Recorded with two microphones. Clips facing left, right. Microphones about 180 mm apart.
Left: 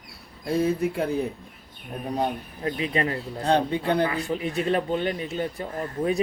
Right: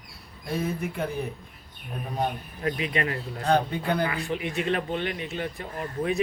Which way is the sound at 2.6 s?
30° left (ahead or behind).